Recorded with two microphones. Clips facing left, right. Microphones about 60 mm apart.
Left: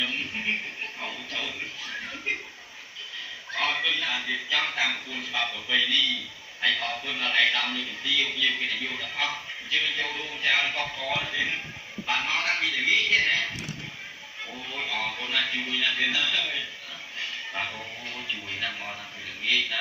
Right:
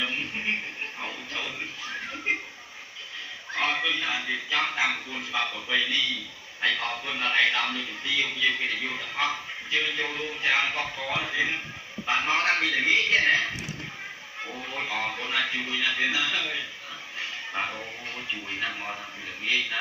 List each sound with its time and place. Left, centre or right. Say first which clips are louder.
0.9 s music: even; centre
3.5 s a man's voice: right 1 dB; centre
12.4 s a man's voice: right 3 dB; right
14.4 s a man's voice: right 1 dB; right
17.2 s music: right 1 dB; centre
18.3 s speech: right 1 dB; centre